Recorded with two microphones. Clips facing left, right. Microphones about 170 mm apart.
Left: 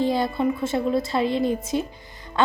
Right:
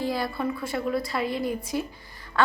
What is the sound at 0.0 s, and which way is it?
A woman's voice, 20° left (ahead or behind).